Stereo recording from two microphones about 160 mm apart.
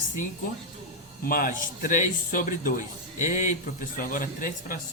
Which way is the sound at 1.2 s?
60° left (ahead or behind).